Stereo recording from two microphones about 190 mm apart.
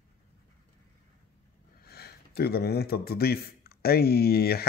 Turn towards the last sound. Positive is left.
turn(degrees=55)  # may be behind; listen again after turning